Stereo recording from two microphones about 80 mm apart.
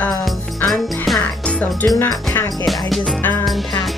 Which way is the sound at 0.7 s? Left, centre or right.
Centre.